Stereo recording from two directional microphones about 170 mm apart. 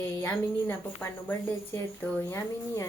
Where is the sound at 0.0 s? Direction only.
15° left (ahead or behind).